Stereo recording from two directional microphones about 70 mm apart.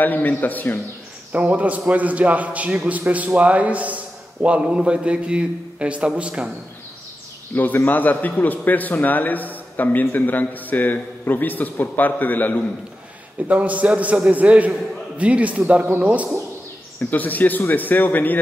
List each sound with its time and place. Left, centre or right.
0.0 s a man's voice: left
1.3 s a man's voice: right
7.5 s a man's voice: left
13.5 s a man's voice: right
17.1 s a man's voice: left